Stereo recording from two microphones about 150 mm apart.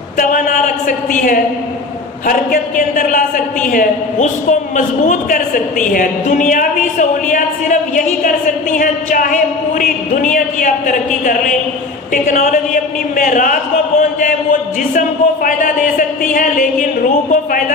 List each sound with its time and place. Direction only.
0.2 s a man's voice: 60° left (ahead or behind)
2.2 s a man's voice: 60° left (ahead or behind)
12.1 s a man's voice: 60° left (ahead or behind)